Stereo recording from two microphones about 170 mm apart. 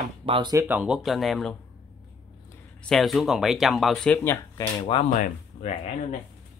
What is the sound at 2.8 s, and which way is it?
A man's voice, centre (ahead or behind).